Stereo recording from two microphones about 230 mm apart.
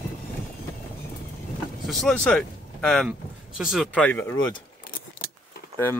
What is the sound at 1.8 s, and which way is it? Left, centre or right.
Speech, centre.